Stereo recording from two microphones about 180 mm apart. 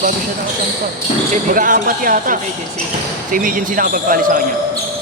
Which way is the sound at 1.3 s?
50° right (ahead or behind).